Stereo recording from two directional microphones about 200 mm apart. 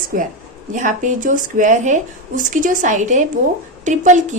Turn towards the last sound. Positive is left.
turn(degrees=-35)  # may be behind; listen again after turning